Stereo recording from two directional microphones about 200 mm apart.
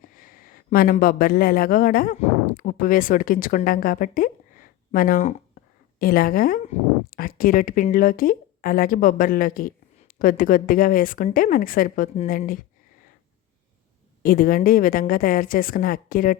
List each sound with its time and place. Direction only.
0.0 s speech: 45° left (ahead or behind)
14.2 s speech: 45° left (ahead or behind)